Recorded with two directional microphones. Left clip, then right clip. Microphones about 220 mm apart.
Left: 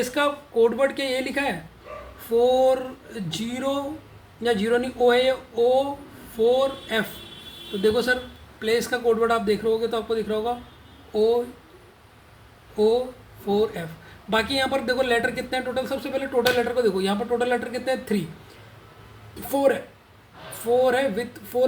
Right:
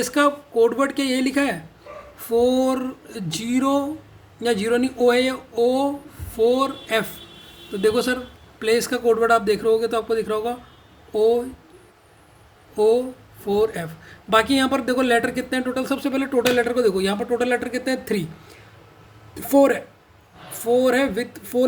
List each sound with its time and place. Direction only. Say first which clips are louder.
0.0 s a man's voice: right 4 dB; 45° right (ahead or behind)
12.7 s a man's voice: right 3 dB; 40° right (ahead or behind)
19.4 s speech: right 5 dB; 45° right (ahead or behind)